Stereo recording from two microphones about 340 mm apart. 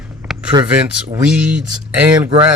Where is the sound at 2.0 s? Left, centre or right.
Centre.